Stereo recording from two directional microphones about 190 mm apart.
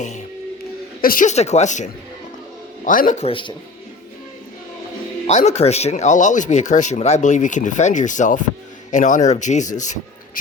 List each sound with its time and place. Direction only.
1.0 s speech: 45° left (ahead or behind); by 3.5 s 30° left (ahead or behind)
5.2 s speech: 35° left (ahead or behind)